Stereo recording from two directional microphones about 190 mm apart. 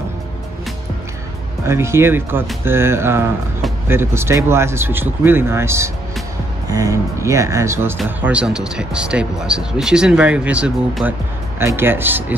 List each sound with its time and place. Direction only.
1.7 s speech: 15° right (ahead or behind)